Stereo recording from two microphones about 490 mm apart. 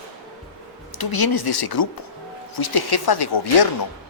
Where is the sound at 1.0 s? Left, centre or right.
Left.